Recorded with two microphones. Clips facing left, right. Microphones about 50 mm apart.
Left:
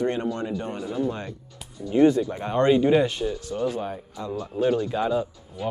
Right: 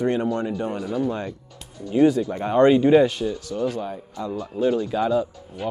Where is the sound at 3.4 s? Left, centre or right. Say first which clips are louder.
Right 1 dB; centre.